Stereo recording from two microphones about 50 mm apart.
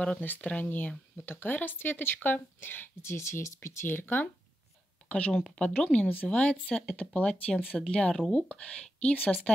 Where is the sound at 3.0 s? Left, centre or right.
Left.